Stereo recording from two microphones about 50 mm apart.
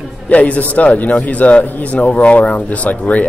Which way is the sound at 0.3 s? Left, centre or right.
Left.